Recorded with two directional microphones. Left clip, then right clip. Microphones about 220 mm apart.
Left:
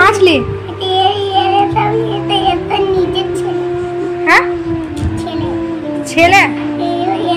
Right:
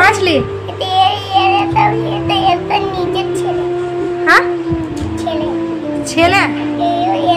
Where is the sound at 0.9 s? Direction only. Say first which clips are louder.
Even; 30° right (ahead or behind).